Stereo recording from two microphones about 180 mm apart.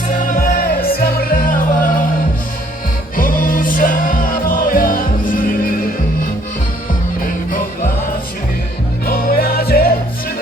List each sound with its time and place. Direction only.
0.3 s music: 50° left (ahead or behind)
3.2 s music: 50° left (ahead or behind)
7.3 s music: 50° left (ahead or behind)
9.0 s music: 55° left (ahead or behind)